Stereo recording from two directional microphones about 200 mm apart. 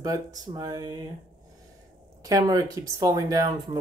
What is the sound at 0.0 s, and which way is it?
Speech, 20° right (ahead or behind).